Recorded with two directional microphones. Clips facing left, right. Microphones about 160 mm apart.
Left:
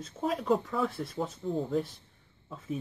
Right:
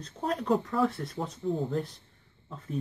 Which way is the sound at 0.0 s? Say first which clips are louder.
Even; centre (ahead or behind).